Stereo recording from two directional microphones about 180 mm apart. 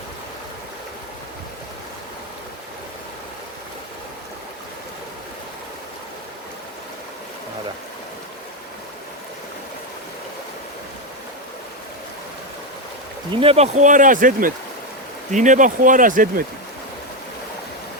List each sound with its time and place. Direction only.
13.3 s speech: 30° right (ahead or behind); by 16.3 s 50° right (ahead or behind)